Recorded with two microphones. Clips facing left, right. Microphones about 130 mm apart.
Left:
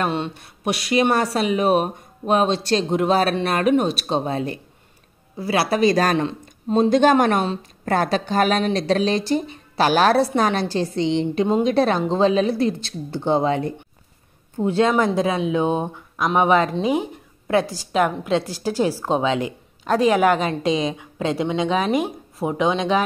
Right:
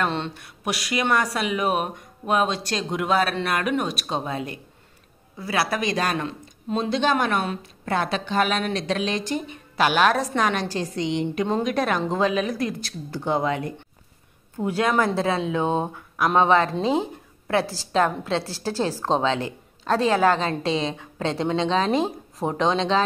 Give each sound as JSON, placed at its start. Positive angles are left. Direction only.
{"t": 0.0, "sound": "a woman's voice", "side_deg": 15}
{"t": 0.4, "sound": "a woman's voice", "side_deg": 25}
{"t": 6.1, "sound": "a sound", "side_deg": 25}
{"t": 6.8, "sound": "a woman's voice", "side_deg": 45}